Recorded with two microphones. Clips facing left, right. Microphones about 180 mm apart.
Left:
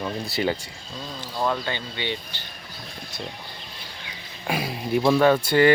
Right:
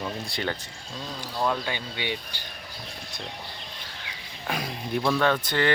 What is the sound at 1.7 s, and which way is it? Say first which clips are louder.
Speech: left 2 dB; 10° right (ahead or behind).